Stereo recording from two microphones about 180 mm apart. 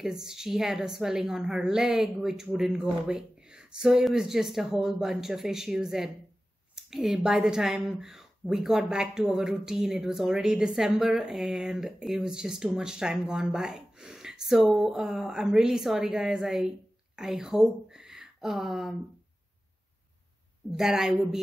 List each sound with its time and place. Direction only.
0.0 s speech: 5° right (ahead or behind)
20.7 s speech: centre (ahead or behind)